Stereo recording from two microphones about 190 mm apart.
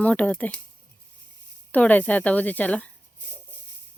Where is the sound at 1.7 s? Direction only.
10° left (ahead or behind).